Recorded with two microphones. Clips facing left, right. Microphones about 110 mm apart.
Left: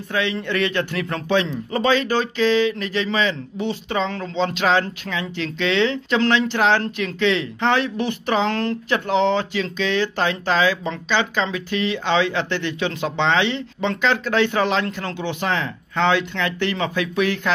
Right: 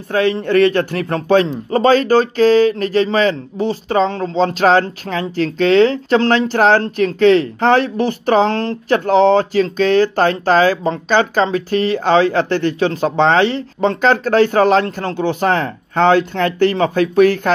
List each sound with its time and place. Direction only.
0.1 s a man's voice: 40° right (ahead or behind)